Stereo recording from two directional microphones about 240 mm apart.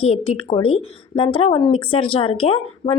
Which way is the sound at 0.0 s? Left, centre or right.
Left.